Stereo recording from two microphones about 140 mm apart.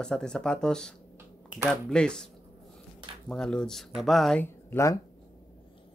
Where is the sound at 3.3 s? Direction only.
5° left (ahead or behind).